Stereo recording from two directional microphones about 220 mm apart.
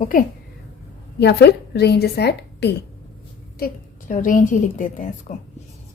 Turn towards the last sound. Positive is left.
turn(degrees=35)  # may be behind; listen again after turning